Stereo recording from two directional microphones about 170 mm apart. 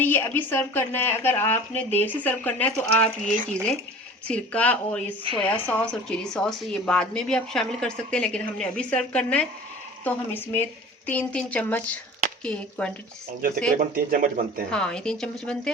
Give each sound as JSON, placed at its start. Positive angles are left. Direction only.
{"t": 0.0, "sound": "a woman's voice", "side_deg": 10}
{"t": 13.9, "sound": "speech", "side_deg": -55}
{"t": 14.7, "sound": "a woman's voice", "side_deg": 5}